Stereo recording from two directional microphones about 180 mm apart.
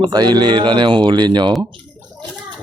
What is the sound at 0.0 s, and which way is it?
Speech, 25° right (ahead or behind).